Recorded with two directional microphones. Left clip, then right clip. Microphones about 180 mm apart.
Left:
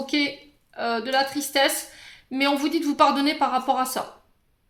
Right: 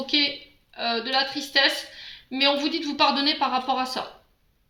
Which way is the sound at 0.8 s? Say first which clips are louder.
Left 1 dB; 60° left (ahead or behind).